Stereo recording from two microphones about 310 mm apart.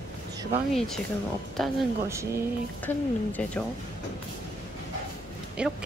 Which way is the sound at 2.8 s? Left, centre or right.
Centre.